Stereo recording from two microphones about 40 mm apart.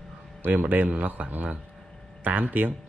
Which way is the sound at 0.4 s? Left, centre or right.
Right.